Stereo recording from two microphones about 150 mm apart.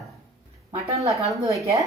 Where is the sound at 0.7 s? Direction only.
20° right (ahead or behind).